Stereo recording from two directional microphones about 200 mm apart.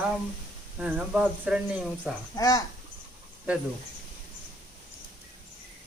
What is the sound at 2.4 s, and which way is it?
Speech, 15° left (ahead or behind).